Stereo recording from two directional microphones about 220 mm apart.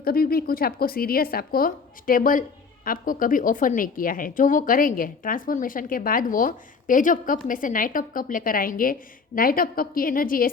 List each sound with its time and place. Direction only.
0.0 s a woman's voice: 45° left (ahead or behind)